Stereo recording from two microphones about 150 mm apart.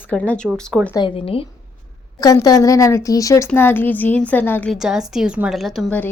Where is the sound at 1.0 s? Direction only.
35° left (ahead or behind).